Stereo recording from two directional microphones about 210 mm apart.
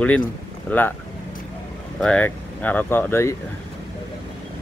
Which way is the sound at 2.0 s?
5° left (ahead or behind).